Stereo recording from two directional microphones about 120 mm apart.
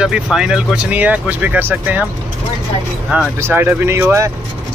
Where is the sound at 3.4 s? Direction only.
20° right (ahead or behind).